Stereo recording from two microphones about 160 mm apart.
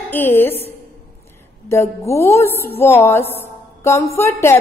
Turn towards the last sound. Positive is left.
turn(degrees=15)  # may be behind; listen again after turning